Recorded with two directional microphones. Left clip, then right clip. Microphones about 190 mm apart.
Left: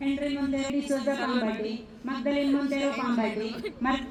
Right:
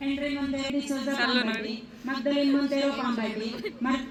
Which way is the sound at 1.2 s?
5° left (ahead or behind).